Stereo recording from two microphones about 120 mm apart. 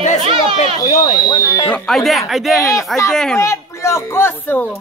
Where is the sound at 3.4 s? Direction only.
25° left (ahead or behind).